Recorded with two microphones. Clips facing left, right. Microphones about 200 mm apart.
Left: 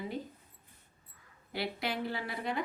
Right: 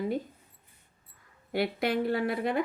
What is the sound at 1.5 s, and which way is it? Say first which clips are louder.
A woman's voice: right 8 dB; 55° right (ahead or behind).